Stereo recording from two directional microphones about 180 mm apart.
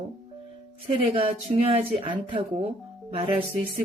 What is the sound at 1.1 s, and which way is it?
Speech, 30° right (ahead or behind).